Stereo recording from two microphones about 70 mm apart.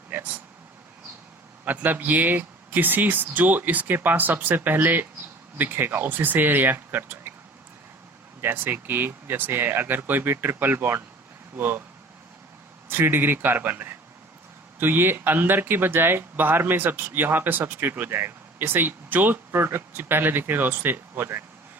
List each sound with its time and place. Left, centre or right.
0.1 s vehicle: right
1.6 s speech: right
8.4 s speech: right
12.9 s speech: right